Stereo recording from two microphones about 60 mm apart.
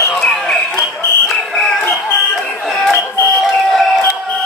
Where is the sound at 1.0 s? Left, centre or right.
Left.